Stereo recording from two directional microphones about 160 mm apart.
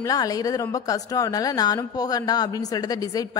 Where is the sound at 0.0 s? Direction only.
20° left (ahead or behind).